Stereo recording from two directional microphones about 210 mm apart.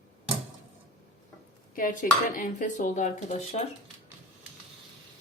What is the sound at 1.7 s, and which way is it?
A woman's voice, 40° left (ahead or behind).